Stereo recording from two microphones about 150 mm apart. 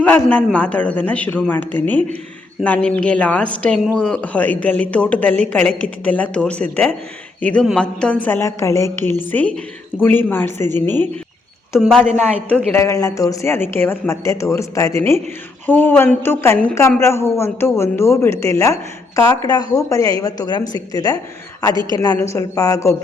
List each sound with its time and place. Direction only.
0.0 s a woman's voice: 10° left (ahead or behind)
12.7 s a woman's voice: 20° left (ahead or behind)